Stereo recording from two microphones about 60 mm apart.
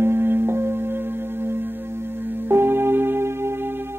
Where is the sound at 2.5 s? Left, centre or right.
Right.